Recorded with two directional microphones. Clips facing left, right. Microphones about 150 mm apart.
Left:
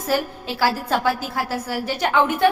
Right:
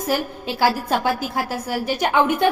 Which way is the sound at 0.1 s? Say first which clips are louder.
Left 1 dB; 15° right (ahead or behind).